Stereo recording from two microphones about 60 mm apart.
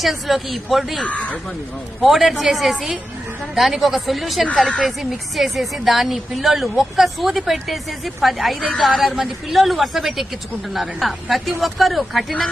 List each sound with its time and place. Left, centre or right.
0.0 s a woman's voice: centre
1.0 s speech: left
2.0 s a woman's voice: centre